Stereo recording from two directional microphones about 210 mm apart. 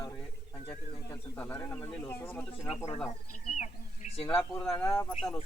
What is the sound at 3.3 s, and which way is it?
Bird, 35° left (ahead or behind).